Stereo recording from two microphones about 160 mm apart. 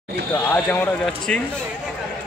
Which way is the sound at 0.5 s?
10° left (ahead or behind).